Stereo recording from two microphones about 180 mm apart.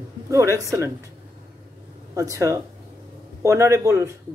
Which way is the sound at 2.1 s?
20° right (ahead or behind).